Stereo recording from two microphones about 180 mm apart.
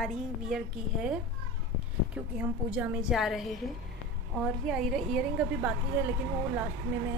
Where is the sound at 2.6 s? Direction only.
5° right (ahead or behind).